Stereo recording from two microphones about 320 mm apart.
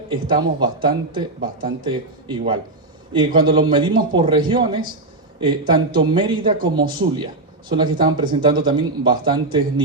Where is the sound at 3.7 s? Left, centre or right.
Centre.